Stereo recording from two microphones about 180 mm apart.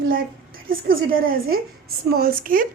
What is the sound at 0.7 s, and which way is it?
A woman's voice, 55° right (ahead or behind).